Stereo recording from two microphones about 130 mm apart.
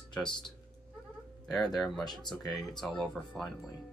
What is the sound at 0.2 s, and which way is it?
Speech, 35° left (ahead or behind).